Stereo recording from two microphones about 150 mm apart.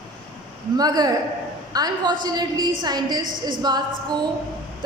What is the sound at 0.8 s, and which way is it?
A woman's voice, 25° right (ahead or behind).